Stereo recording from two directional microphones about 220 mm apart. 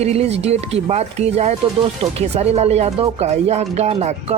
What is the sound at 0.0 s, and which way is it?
Speech, 30° right (ahead or behind).